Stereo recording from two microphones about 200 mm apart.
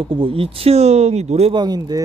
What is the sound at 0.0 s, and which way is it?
Speech, 25° right (ahead or behind).